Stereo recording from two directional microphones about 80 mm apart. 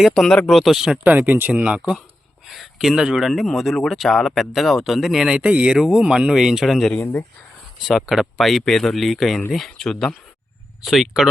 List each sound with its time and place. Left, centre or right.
0.0 s speech: centre
1.0 s speech: right
2.5 s speech: centre